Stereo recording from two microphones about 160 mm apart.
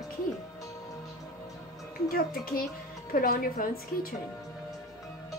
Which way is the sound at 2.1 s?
65° left (ahead or behind).